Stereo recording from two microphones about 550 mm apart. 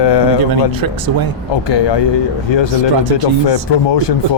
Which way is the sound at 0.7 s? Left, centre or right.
Right.